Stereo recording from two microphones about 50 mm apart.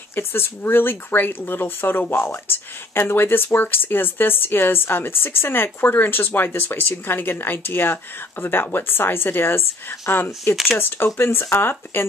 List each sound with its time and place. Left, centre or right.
0.1 s speech: left
10.5 s speech: centre
11.1 s speech: left